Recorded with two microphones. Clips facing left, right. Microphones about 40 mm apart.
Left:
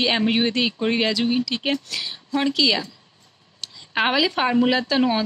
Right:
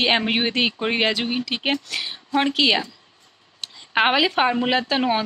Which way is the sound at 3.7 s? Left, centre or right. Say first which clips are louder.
Right 2 dB; right.